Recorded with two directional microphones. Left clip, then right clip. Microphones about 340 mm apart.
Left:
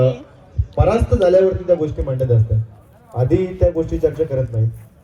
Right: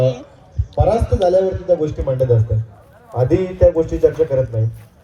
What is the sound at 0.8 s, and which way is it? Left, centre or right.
Speech, centre.